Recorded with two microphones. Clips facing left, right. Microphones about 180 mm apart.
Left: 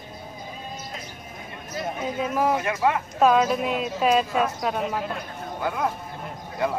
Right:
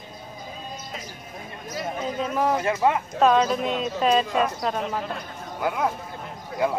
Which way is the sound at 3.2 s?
5° left (ahead or behind).